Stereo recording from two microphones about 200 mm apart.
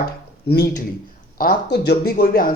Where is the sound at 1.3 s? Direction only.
50° left (ahead or behind).